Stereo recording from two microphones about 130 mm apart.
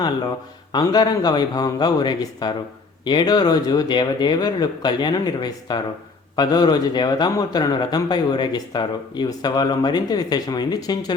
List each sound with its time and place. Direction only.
0.7 s a man's voice: 30° left (ahead or behind)